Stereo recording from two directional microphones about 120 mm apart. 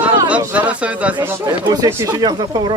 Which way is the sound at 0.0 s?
10° right (ahead or behind).